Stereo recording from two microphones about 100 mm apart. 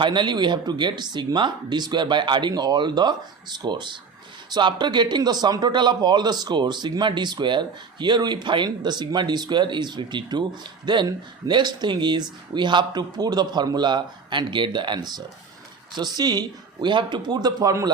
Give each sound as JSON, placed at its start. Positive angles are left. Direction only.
{"t": 0.0, "sound": "a man's voice", "side_deg": -50}